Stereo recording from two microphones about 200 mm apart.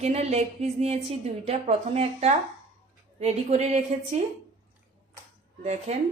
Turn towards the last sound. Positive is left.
turn(degrees=-35)  # may be behind; listen again after turning